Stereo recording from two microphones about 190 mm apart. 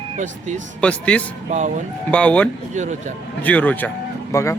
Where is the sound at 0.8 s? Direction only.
5° left (ahead or behind).